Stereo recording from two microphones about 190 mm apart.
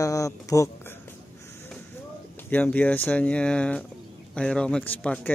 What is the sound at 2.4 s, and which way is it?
Speech, 10° left (ahead or behind).